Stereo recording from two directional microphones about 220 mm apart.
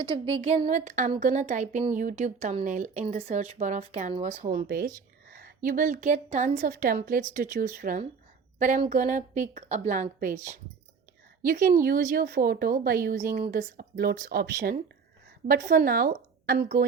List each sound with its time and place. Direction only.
0.4 s speech: 30° right (ahead or behind)